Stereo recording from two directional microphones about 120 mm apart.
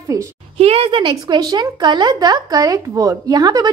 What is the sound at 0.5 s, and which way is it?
Speech, 55° right (ahead or behind).